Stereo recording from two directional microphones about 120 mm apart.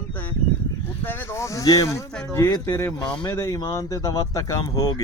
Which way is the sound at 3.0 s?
10° left (ahead or behind).